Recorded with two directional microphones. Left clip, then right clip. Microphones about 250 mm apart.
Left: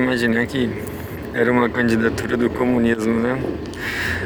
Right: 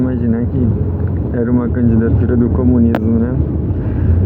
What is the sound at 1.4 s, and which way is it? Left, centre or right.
Speech, left.